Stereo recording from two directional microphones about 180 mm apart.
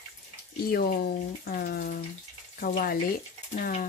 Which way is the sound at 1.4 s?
55° left (ahead or behind).